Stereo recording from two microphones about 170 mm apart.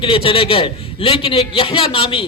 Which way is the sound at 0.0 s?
30° left (ahead or behind).